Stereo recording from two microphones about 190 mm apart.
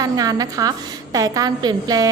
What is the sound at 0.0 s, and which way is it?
A woman's voice, 20° right (ahead or behind).